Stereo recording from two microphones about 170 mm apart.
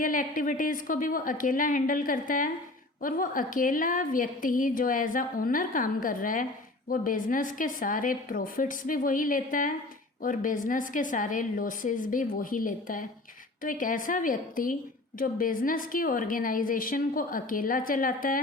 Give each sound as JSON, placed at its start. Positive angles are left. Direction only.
{"t": 0.0, "sound": "a woman's voice", "side_deg": 55}